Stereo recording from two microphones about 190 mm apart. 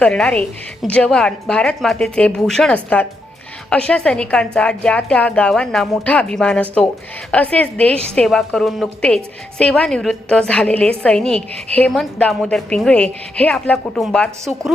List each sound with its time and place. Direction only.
0.0 s a woman's voice: 5° left (ahead or behind)